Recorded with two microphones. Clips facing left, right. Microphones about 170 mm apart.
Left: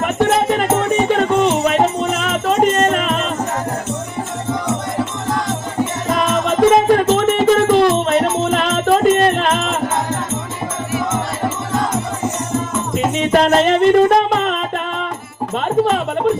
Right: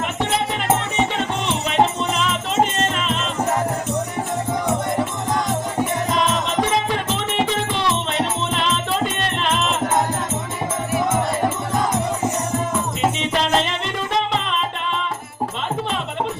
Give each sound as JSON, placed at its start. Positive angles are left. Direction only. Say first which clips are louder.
{"t": 0.0, "sound": "music", "louder": "left 7 dB", "side_deg": 50}
{"t": 6.1, "sound": "music", "louder": "left 4 dB", "side_deg": 55}
{"t": 13.3, "sound": "music", "louder": "left 8 dB", "side_deg": 50}